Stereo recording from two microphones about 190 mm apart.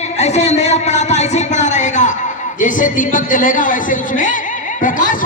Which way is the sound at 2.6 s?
45° left (ahead or behind).